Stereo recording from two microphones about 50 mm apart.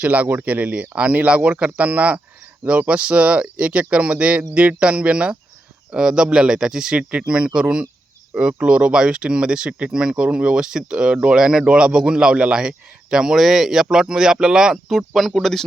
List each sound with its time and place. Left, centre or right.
0.0 s speech: right; by 15.6 s centre